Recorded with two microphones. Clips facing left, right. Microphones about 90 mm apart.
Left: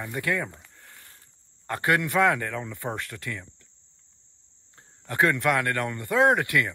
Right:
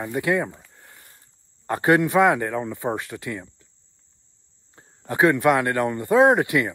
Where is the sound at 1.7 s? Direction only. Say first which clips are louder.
Right 6 dB; 20° right (ahead or behind).